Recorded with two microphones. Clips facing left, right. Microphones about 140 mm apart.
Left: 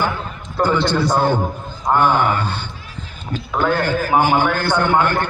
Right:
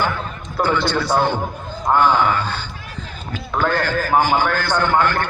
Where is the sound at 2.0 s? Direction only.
55° left (ahead or behind).